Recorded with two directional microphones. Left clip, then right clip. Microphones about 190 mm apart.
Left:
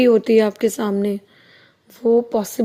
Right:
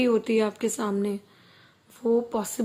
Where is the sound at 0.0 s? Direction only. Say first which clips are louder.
Left 9 dB; 25° left (ahead or behind).